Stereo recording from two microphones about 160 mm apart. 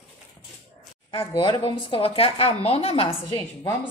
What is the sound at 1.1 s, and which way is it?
A woman's voice, 30° left (ahead or behind).